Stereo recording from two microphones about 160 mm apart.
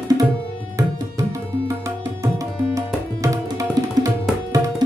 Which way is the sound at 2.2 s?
20° right (ahead or behind).